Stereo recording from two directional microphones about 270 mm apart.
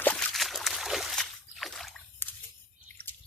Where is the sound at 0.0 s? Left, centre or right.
Centre.